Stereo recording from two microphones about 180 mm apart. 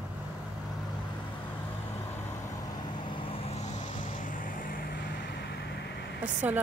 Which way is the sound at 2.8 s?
30° left (ahead or behind).